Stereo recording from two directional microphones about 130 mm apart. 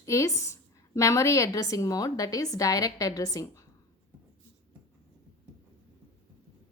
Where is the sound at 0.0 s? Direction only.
25° left (ahead or behind).